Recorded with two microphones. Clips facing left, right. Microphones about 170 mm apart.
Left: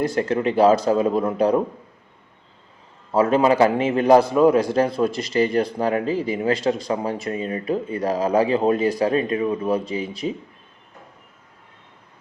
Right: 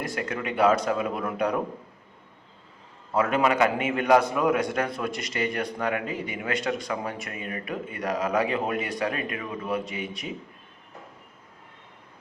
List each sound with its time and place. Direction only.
0.0 s a man's voice: 30° left (ahead or behind)
3.1 s a man's voice: 35° left (ahead or behind)